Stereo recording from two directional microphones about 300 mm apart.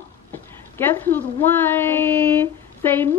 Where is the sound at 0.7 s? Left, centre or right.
Centre.